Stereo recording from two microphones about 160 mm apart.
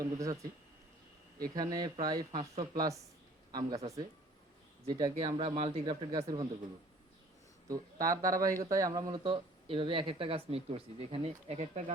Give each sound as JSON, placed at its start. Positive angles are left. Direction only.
{"t": 0.0, "sound": "speech", "side_deg": -20}
{"t": 1.5, "sound": "speech", "side_deg": -25}
{"t": 4.9, "sound": "speech", "side_deg": -25}
{"t": 7.7, "sound": "speech", "side_deg": -20}